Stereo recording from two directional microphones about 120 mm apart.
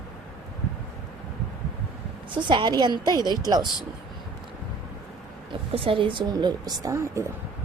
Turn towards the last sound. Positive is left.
turn(degrees=-25)  # may be behind; listen again after turning